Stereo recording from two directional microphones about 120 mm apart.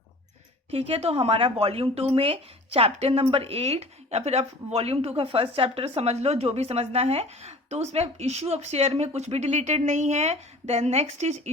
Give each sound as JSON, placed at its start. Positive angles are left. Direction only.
{"t": 0.7, "sound": "a woman's voice", "side_deg": -55}